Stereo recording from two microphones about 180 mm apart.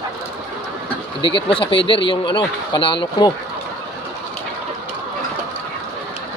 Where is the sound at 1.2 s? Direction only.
30° left (ahead or behind).